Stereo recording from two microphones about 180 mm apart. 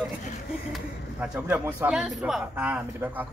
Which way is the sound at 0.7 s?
10° right (ahead or behind).